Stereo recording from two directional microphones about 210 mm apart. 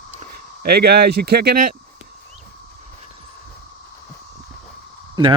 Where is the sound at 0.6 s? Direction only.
50° right (ahead or behind).